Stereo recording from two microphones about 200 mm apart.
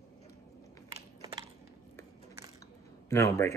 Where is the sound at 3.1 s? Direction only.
15° left (ahead or behind).